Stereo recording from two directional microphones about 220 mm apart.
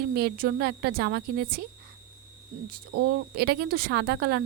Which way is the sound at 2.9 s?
50° right (ahead or behind).